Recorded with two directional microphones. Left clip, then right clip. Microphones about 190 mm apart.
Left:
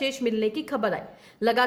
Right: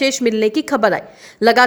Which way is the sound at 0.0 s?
40° right (ahead or behind).